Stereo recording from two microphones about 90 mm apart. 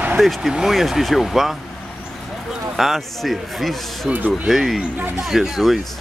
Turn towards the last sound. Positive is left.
turn(degrees=0)  # may be behind; listen again after turning